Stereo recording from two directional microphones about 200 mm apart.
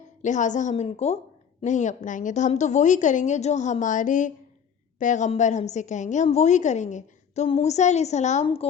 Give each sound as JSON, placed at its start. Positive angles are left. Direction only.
{"t": 0.2, "sound": "a woman's voice", "side_deg": 40}